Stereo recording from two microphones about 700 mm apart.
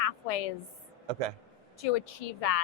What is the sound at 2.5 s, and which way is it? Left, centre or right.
Speech, left.